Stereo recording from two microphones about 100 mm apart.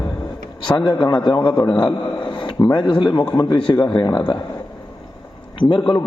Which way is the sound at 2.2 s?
50° left (ahead or behind).